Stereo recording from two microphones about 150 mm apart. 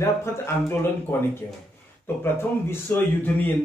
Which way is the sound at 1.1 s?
15° left (ahead or behind).